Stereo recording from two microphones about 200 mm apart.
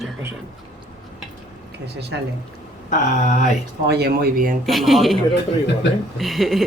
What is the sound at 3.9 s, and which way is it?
Speech, 55° right (ahead or behind).